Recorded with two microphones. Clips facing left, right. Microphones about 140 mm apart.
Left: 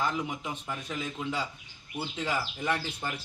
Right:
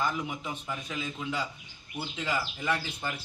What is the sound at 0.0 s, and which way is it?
A man's voice, centre (ahead or behind).